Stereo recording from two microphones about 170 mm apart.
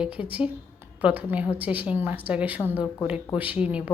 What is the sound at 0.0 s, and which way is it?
A woman's voice, 5° right (ahead or behind).